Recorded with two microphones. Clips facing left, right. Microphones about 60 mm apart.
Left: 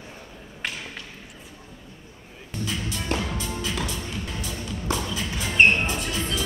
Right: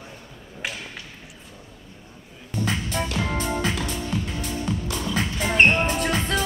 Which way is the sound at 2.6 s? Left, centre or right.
Right.